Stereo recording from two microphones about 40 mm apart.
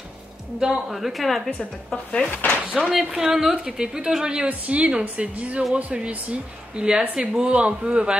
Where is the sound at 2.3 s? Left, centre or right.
Left.